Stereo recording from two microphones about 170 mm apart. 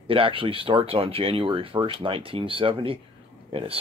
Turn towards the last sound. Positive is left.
turn(degrees=-35)  # may be behind; listen again after turning